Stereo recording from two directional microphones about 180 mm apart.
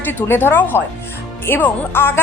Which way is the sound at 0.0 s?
10° left (ahead or behind).